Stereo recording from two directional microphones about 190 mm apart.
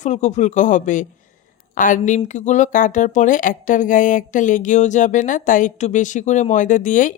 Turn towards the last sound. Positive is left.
turn(degrees=45)  # may be behind; listen again after turning